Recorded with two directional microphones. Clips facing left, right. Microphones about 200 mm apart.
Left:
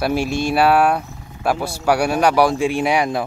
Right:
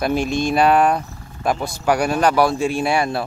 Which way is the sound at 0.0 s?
10° left (ahead or behind).